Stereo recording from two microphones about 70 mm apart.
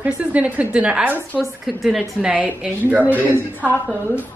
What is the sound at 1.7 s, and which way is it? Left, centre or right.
Speech, centre.